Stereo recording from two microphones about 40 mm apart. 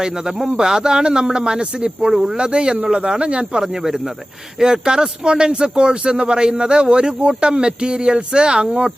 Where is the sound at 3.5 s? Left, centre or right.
Centre.